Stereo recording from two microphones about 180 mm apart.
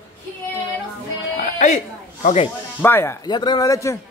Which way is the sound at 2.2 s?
35° left (ahead or behind).